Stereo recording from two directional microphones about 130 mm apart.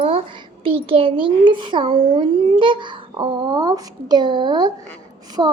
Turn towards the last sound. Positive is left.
turn(degrees=-35)  # may be behind; listen again after turning